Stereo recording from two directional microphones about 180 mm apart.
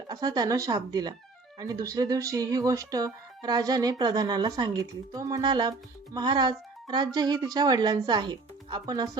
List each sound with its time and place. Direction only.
0.1 s speech: 20° right (ahead or behind)